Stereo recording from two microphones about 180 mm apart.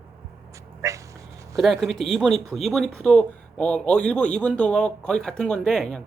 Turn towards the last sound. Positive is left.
turn(degrees=5)  # may be behind; listen again after turning